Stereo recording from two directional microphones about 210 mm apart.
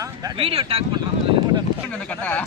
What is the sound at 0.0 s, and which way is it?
Speech, 20° right (ahead or behind).